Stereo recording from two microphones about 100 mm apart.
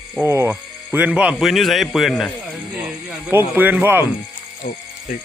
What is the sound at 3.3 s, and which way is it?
Speech, 20° right (ahead or behind).